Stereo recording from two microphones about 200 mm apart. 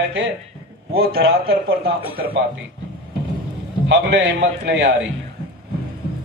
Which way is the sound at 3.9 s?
60° right (ahead or behind).